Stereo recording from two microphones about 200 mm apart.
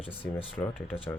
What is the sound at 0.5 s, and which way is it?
Speech, 10° left (ahead or behind).